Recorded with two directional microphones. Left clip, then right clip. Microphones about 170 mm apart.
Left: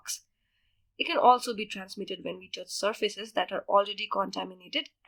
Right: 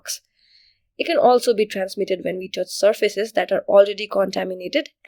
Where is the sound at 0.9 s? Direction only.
35° right (ahead or behind).